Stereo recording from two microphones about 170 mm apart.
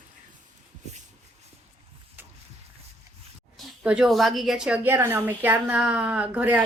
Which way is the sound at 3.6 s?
5° right (ahead or behind).